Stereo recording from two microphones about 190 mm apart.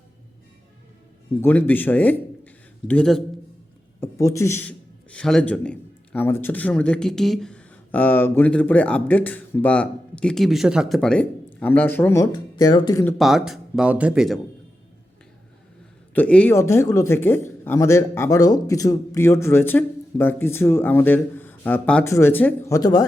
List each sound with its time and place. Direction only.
1.4 s a man's voice: 10° left (ahead or behind)
4.0 s a man's voice: 15° left (ahead or behind)
13.1 s speech: centre (ahead or behind)
16.1 s a man's voice: 10° left (ahead or behind)